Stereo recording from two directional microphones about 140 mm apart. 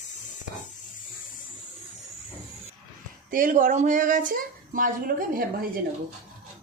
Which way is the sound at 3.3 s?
75° right (ahead or behind).